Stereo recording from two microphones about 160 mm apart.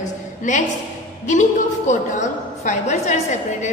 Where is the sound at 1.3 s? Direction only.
50° left (ahead or behind).